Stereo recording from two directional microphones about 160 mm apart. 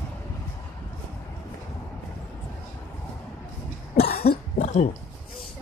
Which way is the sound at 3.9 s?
75° left (ahead or behind).